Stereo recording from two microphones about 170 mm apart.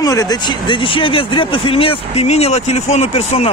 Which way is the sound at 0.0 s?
20° left (ahead or behind).